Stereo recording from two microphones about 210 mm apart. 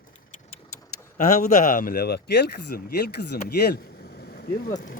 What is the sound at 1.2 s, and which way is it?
Speech, 35° left (ahead or behind).